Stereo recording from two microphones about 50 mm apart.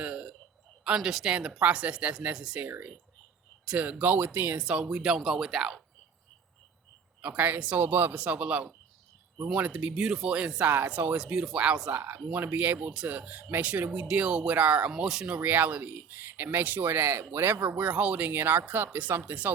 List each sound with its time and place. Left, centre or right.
0.0 s a sound: right
0.9 s speech: centre
3.7 s speech: right
4.5 s speech: right
7.2 s speech: right
7.8 s speech: right
8.1 s speech: right
9.9 s speech: centre; by 11.2 s right
11.2 s speech: centre
11.9 s speech: right
15.0 s speech: centre
15.4 s speech: right
17.6 s speech: right
18.3 s speech: right